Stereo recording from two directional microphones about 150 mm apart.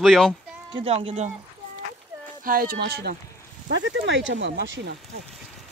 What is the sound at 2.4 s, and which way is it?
Speech, 75° right (ahead or behind).